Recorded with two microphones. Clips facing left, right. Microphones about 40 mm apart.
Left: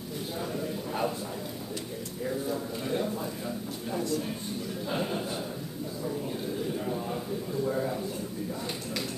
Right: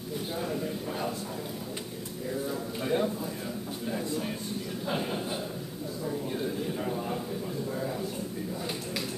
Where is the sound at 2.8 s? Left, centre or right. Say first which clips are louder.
Right 4 dB; centre.